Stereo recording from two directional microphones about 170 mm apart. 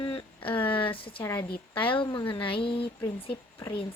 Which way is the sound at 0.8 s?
30° left (ahead or behind).